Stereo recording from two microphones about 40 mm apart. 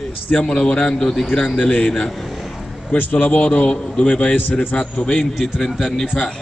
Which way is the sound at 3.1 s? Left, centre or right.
Left.